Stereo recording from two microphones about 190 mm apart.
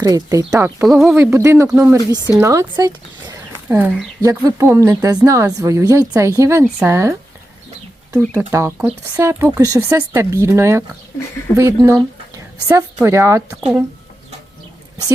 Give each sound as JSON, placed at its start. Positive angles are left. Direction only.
{"t": 0.0, "sound": "speech", "side_deg": -20}
{"t": 8.4, "sound": "speech", "side_deg": -10}